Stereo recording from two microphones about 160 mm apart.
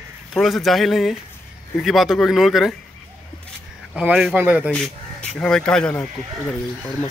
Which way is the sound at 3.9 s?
5° right (ahead or behind).